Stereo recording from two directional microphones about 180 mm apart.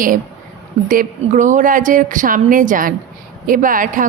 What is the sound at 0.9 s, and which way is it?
A woman's voice, 45° right (ahead or behind).